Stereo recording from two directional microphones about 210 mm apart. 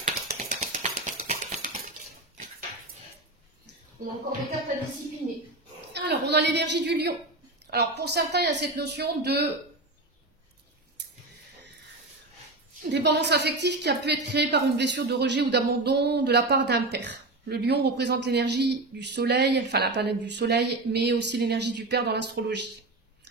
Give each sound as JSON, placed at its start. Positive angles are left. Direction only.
{"t": 0.0, "sound": "a sound", "side_deg": -35}
{"t": 5.9, "sound": "a woman's voice", "side_deg": -55}
{"t": 12.9, "sound": "a woman's voice", "side_deg": -55}